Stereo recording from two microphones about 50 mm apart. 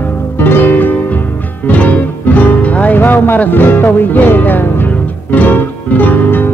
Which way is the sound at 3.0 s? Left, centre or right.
Left.